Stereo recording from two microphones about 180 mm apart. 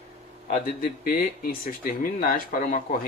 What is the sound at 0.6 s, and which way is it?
Speech, 50° left (ahead or behind).